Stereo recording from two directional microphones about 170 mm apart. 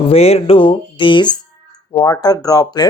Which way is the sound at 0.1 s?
35° left (ahead or behind).